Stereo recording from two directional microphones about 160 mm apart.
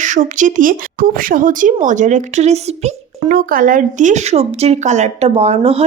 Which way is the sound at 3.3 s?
65° right (ahead or behind).